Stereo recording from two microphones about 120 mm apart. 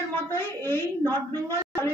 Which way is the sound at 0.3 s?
20° left (ahead or behind).